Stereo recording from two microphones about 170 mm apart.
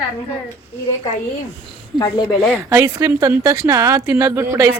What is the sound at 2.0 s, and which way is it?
Speech, 25° left (ahead or behind).